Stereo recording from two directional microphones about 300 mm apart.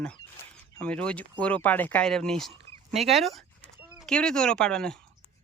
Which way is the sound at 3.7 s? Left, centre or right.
Centre.